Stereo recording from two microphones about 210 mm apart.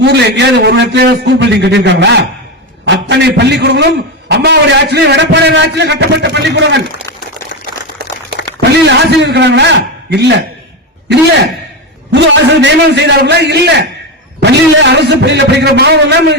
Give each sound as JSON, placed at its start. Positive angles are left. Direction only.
{"t": 0.0, "sound": "a man's voice", "side_deg": -55}
{"t": 8.7, "sound": "a man's voice", "side_deg": -55}
{"t": 12.1, "sound": "a man's voice", "side_deg": -55}